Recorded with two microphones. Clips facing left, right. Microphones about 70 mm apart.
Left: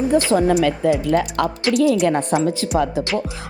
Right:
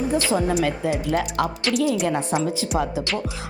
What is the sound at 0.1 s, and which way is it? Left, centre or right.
A woman's voice, left.